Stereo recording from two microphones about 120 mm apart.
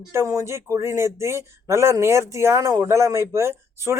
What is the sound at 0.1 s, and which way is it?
Speech, 25° right (ahead or behind).